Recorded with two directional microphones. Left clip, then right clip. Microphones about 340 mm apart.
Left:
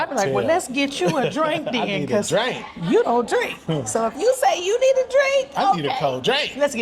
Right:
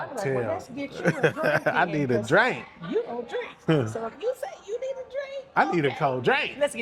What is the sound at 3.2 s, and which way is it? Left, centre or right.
A woman's voice, left.